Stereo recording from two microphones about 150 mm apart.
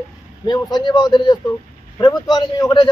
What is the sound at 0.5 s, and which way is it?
A man's voice, 30° left (ahead or behind).